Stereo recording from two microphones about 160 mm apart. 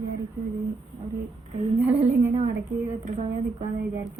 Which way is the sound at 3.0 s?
45° right (ahead or behind).